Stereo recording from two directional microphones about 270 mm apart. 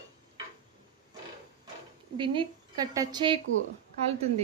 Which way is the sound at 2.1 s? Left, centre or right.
Centre.